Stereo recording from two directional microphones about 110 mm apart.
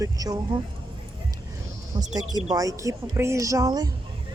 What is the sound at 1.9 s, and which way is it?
Speech, 50° right (ahead or behind).